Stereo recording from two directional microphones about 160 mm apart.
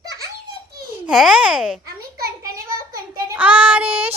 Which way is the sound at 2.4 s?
20° right (ahead or behind).